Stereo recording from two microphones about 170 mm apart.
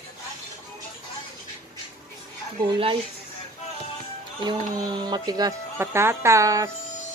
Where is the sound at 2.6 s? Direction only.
30° right (ahead or behind).